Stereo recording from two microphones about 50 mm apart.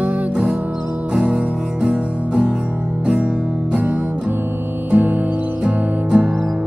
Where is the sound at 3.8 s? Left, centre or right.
Right.